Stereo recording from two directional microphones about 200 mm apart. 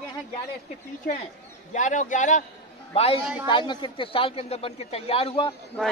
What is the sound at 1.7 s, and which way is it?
A man's voice, 40° left (ahead or behind).